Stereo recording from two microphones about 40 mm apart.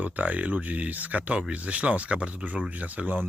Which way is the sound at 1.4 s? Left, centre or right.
Right.